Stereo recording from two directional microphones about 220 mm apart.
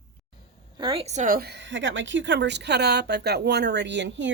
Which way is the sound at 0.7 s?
20° right (ahead or behind).